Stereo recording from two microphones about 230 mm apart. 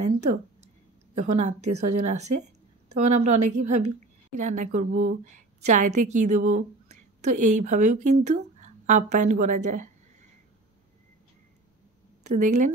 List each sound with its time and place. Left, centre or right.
0.0 s a woman's voice: right
12.2 s speech: right